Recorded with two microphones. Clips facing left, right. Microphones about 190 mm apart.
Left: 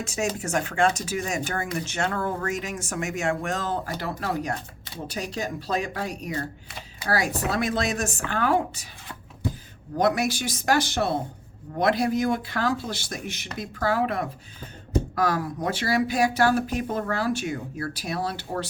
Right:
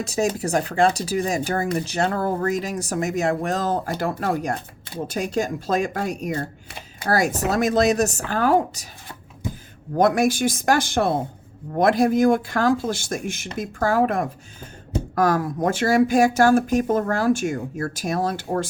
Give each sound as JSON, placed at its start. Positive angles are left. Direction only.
{"t": 0.0, "sound": "speech", "side_deg": -35}